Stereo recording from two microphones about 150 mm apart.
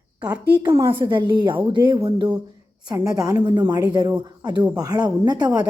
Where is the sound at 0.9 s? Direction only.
35° right (ahead or behind).